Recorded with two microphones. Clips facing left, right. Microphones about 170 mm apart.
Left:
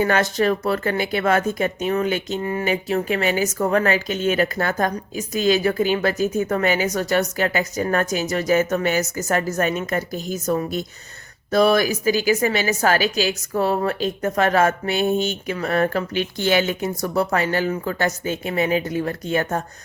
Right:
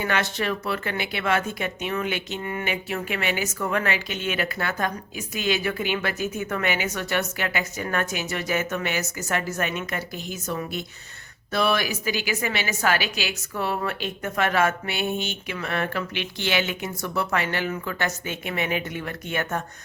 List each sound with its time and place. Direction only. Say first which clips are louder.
0.0 s speech: left 7 dB; 40° left (ahead or behind)